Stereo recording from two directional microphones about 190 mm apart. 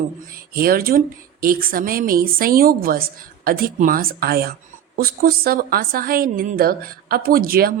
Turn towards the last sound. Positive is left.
turn(degrees=-50)  # may be behind; listen again after turning